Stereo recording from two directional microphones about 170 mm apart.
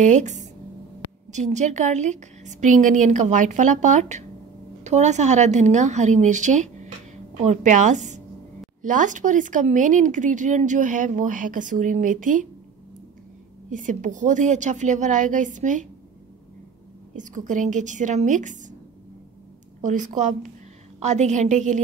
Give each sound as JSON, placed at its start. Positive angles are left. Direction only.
{"t": 0.0, "sound": "a woman's voice", "side_deg": -45}
{"t": 13.7, "sound": "speech", "side_deg": -50}
{"t": 17.1, "sound": "speech", "side_deg": -50}
{"t": 19.8, "sound": "speech", "side_deg": -45}